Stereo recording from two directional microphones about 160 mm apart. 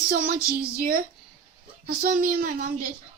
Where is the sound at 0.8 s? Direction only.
60° right (ahead or behind).